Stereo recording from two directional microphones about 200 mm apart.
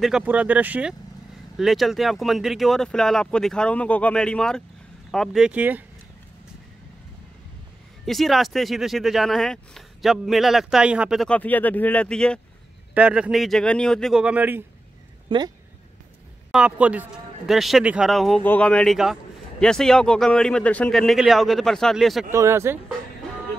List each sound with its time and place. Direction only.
0.0 s speech: 5° right (ahead or behind)
8.0 s speech: centre (ahead or behind)
12.9 s speech: 5° right (ahead or behind)
15.2 s speech: 20° right (ahead or behind)
16.5 s speech: 5° right (ahead or behind)
22.3 s speech: 15° right (ahead or behind)